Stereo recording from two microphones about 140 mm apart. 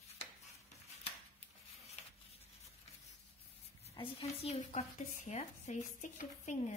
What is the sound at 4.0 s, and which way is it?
Speech, 45° left (ahead or behind).